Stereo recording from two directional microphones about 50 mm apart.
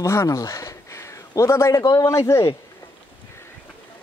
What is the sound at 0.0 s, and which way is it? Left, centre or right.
A man's voice, left.